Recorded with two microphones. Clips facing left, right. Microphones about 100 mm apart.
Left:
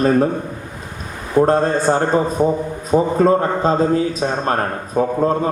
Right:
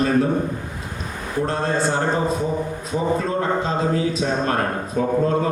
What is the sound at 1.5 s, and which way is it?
Speech, 40° left (ahead or behind).